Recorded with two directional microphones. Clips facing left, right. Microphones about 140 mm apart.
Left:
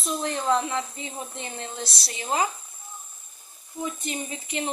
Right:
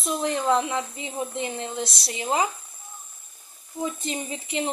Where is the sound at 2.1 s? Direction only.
20° right (ahead or behind).